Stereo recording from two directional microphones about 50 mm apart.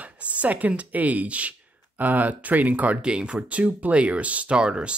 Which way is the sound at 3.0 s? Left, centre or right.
Centre.